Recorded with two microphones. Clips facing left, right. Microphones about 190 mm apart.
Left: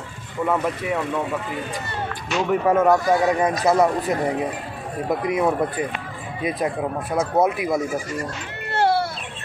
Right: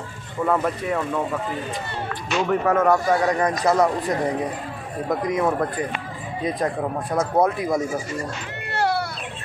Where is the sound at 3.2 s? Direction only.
20° left (ahead or behind).